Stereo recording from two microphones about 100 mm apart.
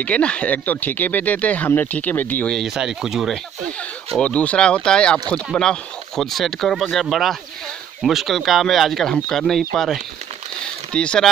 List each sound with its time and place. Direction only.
0.0 s speech: 10° left (ahead or behind)
2.5 s speech: 5° right (ahead or behind)
4.2 s speech: 10° left (ahead or behind)
10.6 s a sound: 10° left (ahead or behind)